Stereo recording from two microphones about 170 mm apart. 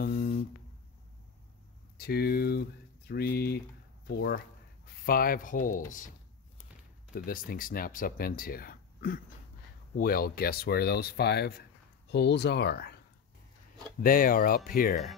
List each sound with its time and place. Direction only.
0.0 s a sound: 60° left (ahead or behind)
2.0 s speech: 65° left (ahead or behind)
5.0 s speech: 60° left (ahead or behind)
7.2 s speech: 60° left (ahead or behind)
14.0 s speech: 55° left (ahead or behind)